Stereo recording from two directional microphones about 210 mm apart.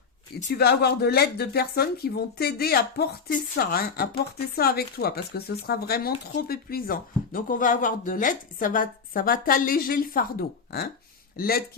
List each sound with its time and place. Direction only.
0.5 s speech: 50° left (ahead or behind)
11.3 s speech: 45° left (ahead or behind)